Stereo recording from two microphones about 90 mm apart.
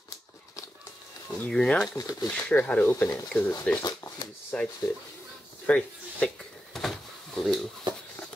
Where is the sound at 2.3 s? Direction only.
15° left (ahead or behind).